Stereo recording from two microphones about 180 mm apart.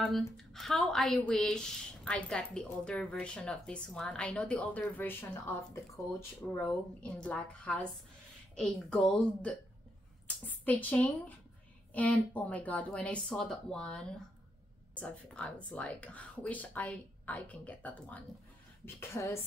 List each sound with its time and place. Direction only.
0.0 s speech: centre (ahead or behind)